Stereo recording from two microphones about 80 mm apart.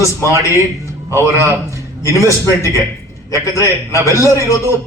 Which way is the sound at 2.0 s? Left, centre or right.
Right.